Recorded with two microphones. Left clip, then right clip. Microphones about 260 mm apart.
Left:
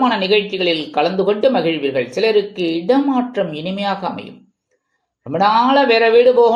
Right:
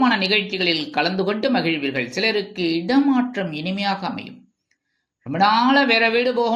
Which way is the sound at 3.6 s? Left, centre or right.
Right.